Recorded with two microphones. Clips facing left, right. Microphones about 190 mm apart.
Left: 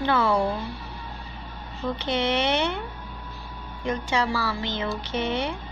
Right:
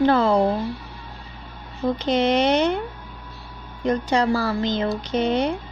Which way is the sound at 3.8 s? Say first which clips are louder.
Right 6 dB; 40° right (ahead or behind).